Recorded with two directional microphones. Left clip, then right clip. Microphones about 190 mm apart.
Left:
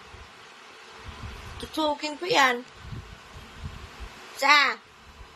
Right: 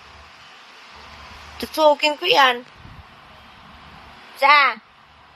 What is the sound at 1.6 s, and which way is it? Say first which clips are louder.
Speech: right 12 dB; 15° right (ahead or behind).